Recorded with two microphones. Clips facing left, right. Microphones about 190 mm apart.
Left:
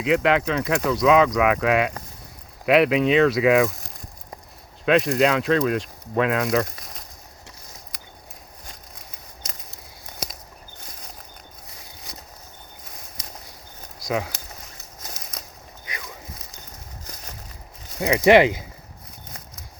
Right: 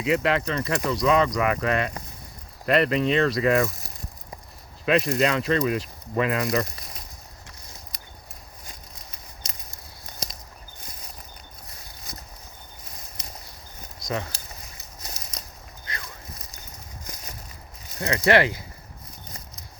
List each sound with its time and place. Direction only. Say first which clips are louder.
0.0 s speech: left 3 dB; centre (ahead or behind)
4.9 s speech: left 3 dB; centre (ahead or behind)
14.0 s speech: left 4 dB; 5° left (ahead or behind)
17.9 s speech: left 5 dB; 15° left (ahead or behind)